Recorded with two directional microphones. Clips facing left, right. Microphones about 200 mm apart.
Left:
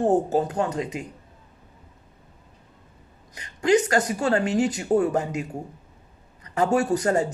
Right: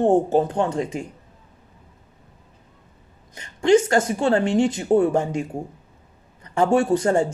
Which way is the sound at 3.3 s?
25° right (ahead or behind).